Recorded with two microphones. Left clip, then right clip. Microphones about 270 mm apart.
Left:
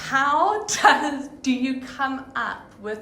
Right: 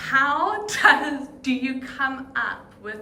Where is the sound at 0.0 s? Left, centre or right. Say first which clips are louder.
Left 1 dB; centre.